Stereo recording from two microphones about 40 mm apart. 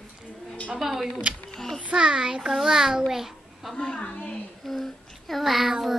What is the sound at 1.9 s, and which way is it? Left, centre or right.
A child's voice, right.